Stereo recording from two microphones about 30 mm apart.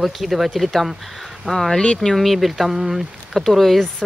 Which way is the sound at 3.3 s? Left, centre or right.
Centre.